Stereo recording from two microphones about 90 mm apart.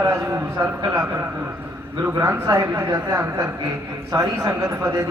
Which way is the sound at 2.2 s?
35° right (ahead or behind).